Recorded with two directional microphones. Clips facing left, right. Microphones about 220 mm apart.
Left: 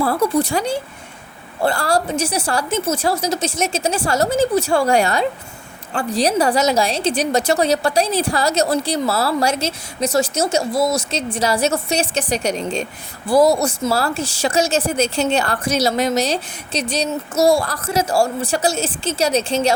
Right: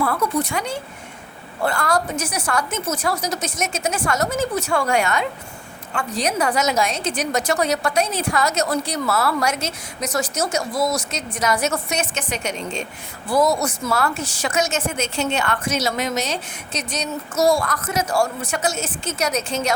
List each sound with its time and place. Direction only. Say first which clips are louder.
0.0 s a woman's voice: left 4 dB; 30° left (ahead or behind)